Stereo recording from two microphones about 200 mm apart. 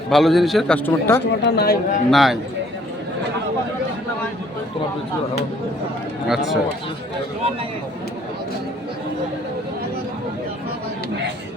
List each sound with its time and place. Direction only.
0.1 s a man's voice: centre (ahead or behind)
0.9 s speech: 10° left (ahead or behind)
1.4 s speech: 55° left (ahead or behind)
2.0 s a man's voice: centre (ahead or behind)
6.2 s a man's voice: centre (ahead or behind)